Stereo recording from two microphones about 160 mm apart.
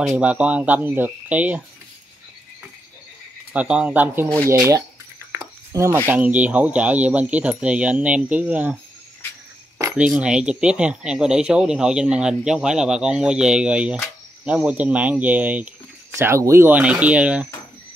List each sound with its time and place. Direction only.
0.0 s speech: 5° right (ahead or behind)
3.5 s speech: 5° right (ahead or behind)
5.4 s a sound: 20° right (ahead or behind)
6.0 s speech: 10° right (ahead or behind)
9.9 s speech: 5° right (ahead or behind)